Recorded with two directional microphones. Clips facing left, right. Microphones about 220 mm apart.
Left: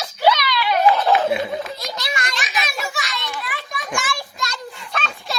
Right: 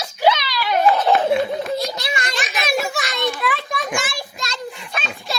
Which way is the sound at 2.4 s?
50° right (ahead or behind).